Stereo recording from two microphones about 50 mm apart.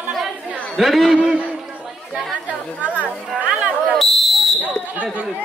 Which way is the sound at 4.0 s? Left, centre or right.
Centre.